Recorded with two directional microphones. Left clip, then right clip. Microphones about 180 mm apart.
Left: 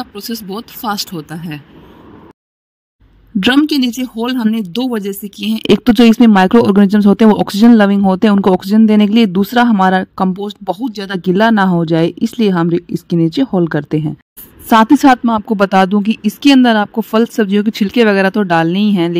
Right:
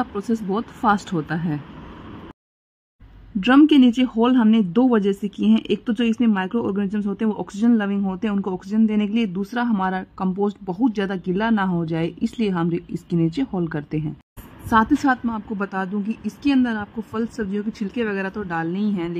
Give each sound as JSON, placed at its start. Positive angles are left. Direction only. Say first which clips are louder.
{"t": 0.5, "sound": "speech", "louder": "right 1 dB", "side_deg": 0}
{"t": 3.3, "sound": "a woman's voice", "louder": "left 3 dB", "side_deg": 45}
{"t": 4.0, "sound": "speech", "louder": "left 1 dB", "side_deg": 0}
{"t": 5.5, "sound": "a woman's voice", "louder": "left 11 dB", "side_deg": 55}